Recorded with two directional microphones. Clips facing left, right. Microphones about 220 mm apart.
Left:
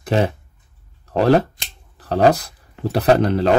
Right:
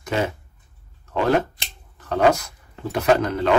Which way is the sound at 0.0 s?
35° left (ahead or behind).